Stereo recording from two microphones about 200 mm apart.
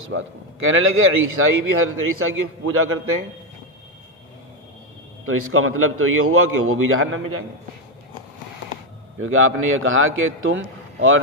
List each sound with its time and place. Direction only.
0.1 s speech: 80° right
5.2 s speech: 90° right
9.2 s a man's voice: 90° right